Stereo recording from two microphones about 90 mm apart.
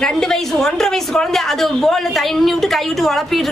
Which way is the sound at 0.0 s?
5° left (ahead or behind).